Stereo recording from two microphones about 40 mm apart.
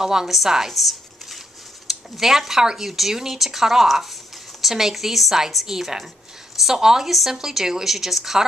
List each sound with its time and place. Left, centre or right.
0.0 s speech: centre
0.7 s a sound: centre
1.9 s speech: centre